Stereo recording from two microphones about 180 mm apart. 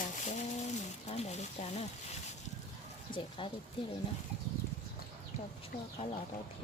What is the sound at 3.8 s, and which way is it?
Speech, 30° left (ahead or behind).